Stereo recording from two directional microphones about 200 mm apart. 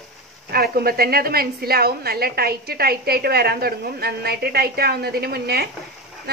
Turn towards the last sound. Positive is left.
turn(degrees=-55)  # may be behind; listen again after turning